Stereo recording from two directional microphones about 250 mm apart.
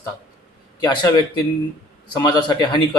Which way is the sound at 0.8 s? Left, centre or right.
Centre.